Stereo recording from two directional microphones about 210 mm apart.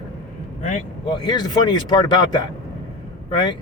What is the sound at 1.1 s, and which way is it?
Speech, 20° left (ahead or behind).